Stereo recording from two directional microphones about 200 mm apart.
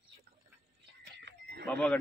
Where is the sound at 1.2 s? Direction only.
55° right (ahead or behind).